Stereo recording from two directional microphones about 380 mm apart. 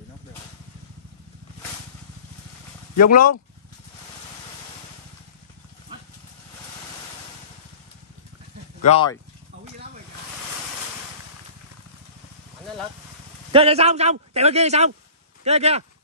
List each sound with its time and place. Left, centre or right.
3.1 s speech: left
8.8 s speech: centre
13.5 s a man's voice: centre